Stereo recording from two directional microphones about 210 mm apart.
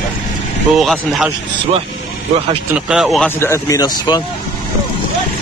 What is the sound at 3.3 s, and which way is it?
Speech, 10° left (ahead or behind).